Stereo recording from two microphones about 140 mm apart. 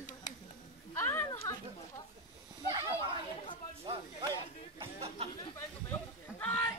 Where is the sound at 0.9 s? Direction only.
20° left (ahead or behind).